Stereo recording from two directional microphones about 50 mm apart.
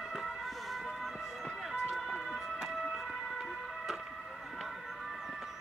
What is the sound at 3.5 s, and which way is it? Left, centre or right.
Music, centre.